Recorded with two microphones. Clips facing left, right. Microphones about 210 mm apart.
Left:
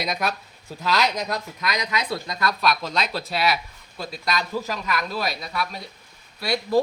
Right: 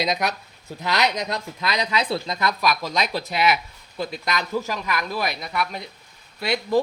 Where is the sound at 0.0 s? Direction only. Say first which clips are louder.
Right 2 dB; 20° right (ahead or behind).